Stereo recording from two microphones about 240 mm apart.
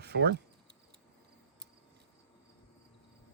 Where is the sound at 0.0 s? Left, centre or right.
Right.